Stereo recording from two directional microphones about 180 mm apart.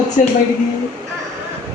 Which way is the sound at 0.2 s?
40° left (ahead or behind).